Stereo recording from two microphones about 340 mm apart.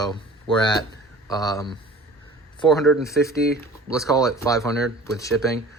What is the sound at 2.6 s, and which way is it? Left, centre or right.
Speech, centre.